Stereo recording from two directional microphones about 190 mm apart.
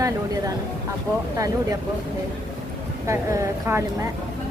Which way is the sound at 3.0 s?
15° right (ahead or behind).